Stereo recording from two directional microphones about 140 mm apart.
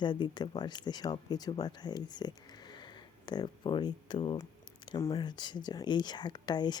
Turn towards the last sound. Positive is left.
turn(degrees=30)  # may be behind; listen again after turning